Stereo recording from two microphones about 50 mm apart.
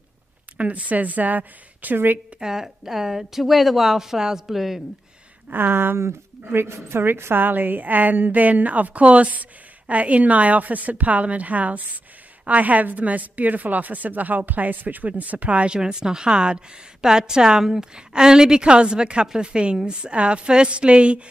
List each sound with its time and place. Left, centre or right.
0.6 s speech: right
2.4 s a woman's voice: centre
5.5 s a woman's voice: right
7.4 s a woman's voice: right